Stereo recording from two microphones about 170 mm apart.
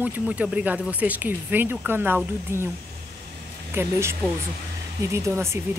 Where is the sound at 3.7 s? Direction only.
15° right (ahead or behind).